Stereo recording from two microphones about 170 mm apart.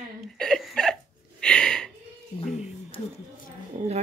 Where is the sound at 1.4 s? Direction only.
5° left (ahead or behind).